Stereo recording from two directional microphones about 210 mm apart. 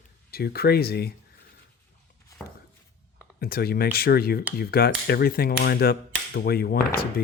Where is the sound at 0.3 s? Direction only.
45° left (ahead or behind).